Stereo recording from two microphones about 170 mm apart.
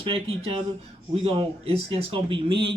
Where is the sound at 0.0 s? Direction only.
35° right (ahead or behind).